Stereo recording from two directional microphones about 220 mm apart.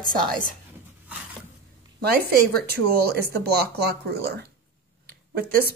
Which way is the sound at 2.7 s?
45° right (ahead or behind).